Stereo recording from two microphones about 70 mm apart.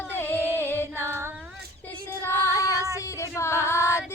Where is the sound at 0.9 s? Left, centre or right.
Right.